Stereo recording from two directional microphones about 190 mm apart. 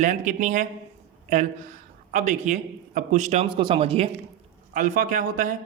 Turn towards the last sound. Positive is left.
turn(degrees=-45)  # may be behind; listen again after turning